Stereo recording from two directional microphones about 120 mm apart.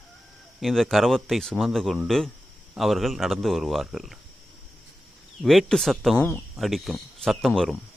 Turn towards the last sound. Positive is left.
turn(degrees=0)  # may be behind; listen again after turning